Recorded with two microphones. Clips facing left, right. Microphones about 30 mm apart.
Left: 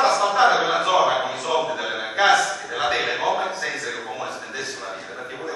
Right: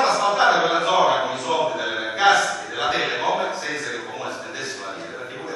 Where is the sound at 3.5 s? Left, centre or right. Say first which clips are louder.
Even; centre.